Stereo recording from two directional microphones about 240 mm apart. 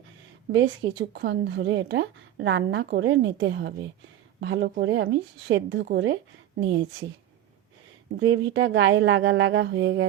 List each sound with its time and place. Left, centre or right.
0.5 s a woman's voice: right
8.1 s a woman's voice: right